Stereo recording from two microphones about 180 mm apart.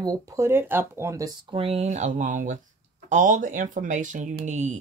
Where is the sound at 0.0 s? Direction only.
20° right (ahead or behind).